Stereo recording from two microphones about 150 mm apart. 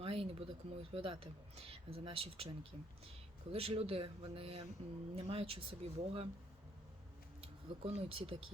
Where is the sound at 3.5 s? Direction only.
40° right (ahead or behind).